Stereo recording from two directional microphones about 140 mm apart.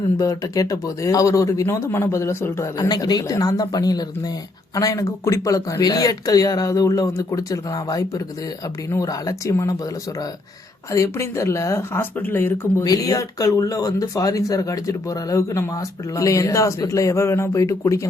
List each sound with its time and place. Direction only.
0.2 s speech: 25° left (ahead or behind)
12.8 s speech: 25° left (ahead or behind)